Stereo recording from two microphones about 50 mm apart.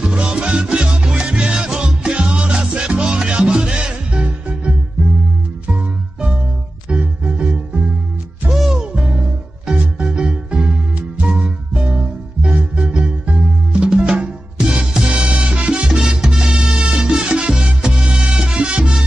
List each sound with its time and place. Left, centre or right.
0.0 s music: centre
8.5 s music: centre